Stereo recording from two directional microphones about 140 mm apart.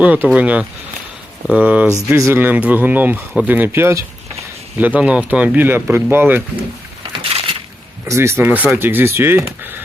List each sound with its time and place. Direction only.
0.0 s speech: 10° right (ahead or behind)
7.2 s crushing: 40° right (ahead or behind)
8.0 s speech: 20° right (ahead or behind)